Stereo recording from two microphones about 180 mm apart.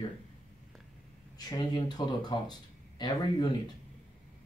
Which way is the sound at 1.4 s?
20° left (ahead or behind).